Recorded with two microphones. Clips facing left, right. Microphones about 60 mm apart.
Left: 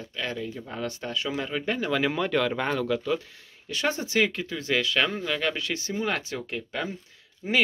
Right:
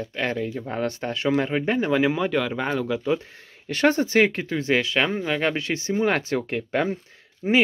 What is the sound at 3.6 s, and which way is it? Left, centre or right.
Speech, right.